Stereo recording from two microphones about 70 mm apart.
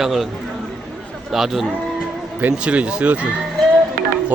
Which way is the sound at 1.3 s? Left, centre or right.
Centre.